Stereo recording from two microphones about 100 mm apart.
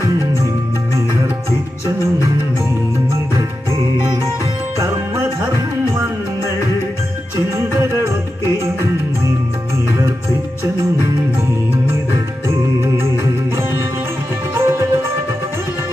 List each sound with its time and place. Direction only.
4.7 s music: 30° right (ahead or behind)
7.3 s music: 30° right (ahead or behind)
14.5 s music: 25° right (ahead or behind)